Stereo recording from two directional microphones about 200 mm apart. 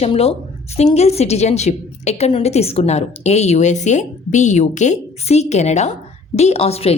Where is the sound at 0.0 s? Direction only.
30° left (ahead or behind).